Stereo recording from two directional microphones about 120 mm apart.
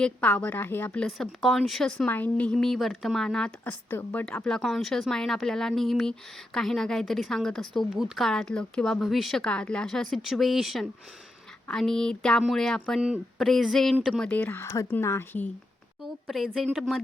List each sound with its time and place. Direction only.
0.0 s a woman's voice: 10° left (ahead or behind)
1.2 s speech: centre (ahead or behind)
3.7 s speech: 15° left (ahead or behind); by 14.3 s centre (ahead or behind)
14.3 s speech: 10° left (ahead or behind)
16.2 s speech: centre (ahead or behind)